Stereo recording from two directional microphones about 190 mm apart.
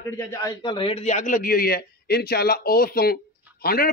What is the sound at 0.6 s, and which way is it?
A man's voice, 25° left (ahead or behind).